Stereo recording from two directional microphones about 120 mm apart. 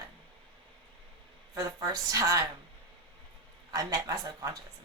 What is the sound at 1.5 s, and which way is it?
Speech, 30° right (ahead or behind).